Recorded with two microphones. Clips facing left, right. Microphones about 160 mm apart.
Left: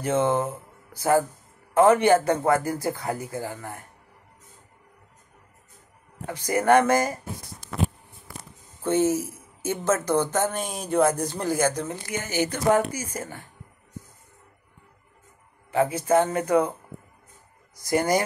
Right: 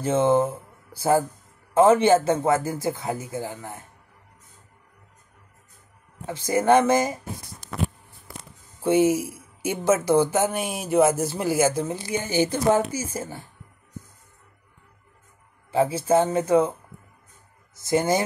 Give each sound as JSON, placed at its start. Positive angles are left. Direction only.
{"t": 0.0, "sound": "speech", "side_deg": -25}
{"t": 0.5, "sound": "a sound", "side_deg": -10}
{"t": 1.7, "sound": "speech", "side_deg": -25}
{"t": 6.2, "sound": "speech", "side_deg": -25}
{"t": 8.8, "sound": "speech", "side_deg": -10}
{"t": 11.9, "sound": "speech", "side_deg": -30}
{"t": 15.9, "sound": "speech", "side_deg": -30}
{"t": 17.7, "sound": "speech", "side_deg": -25}